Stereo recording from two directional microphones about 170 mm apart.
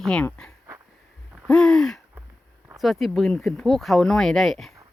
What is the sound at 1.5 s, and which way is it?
Hoot, 5° left (ahead or behind).